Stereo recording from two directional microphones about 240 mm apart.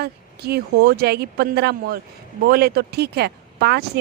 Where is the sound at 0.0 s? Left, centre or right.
Right.